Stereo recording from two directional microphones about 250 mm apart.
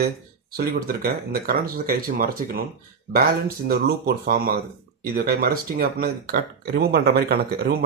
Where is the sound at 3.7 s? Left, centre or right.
Right.